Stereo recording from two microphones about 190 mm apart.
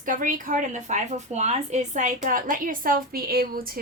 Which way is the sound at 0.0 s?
45° right (ahead or behind).